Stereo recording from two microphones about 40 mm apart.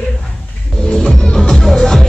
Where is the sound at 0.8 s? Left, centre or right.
Left.